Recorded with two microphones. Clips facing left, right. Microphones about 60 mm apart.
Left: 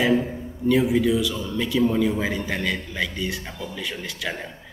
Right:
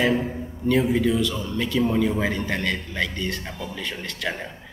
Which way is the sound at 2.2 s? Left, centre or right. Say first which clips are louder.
Right 1 dB; centre.